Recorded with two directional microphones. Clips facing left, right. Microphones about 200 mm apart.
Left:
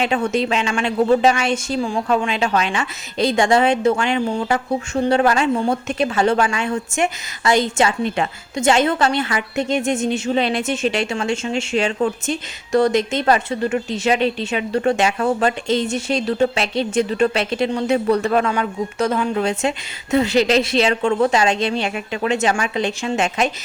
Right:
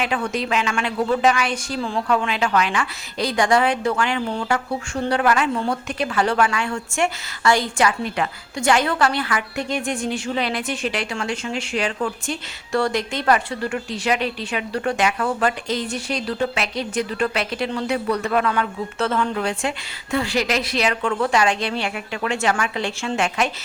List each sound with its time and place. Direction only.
0.0 s a woman's voice: 25° left (ahead or behind)
1.8 s speech: 15° left (ahead or behind)
2.0 s a woman's voice: 25° left (ahead or behind)
18.5 s a woman's voice: 15° left (ahead or behind)